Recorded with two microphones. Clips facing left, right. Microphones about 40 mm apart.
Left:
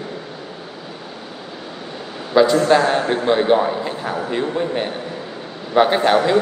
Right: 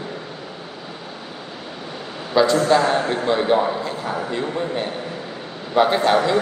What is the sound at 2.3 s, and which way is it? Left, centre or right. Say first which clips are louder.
A man's voice: left 2 dB; left.